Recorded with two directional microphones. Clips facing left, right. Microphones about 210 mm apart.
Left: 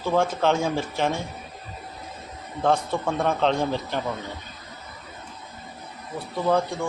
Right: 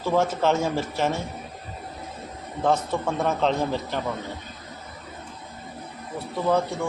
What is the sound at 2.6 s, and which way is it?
Speech, 5° right (ahead or behind).